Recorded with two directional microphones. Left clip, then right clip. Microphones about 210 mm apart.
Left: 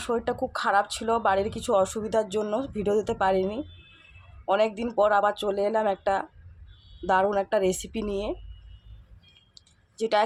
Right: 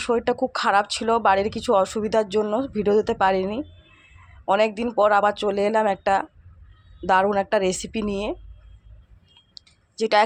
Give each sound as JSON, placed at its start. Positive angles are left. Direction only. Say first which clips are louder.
{"t": 0.0, "sound": "speech", "louder": "right 6 dB", "side_deg": -20}
{"t": 10.0, "sound": "speech", "louder": "right 5 dB", "side_deg": -15}